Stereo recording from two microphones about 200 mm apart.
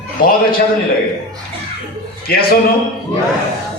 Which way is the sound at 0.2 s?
45° left (ahead or behind).